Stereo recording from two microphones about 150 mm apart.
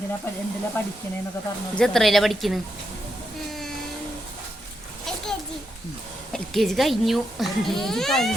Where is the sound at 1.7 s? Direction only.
5° left (ahead or behind).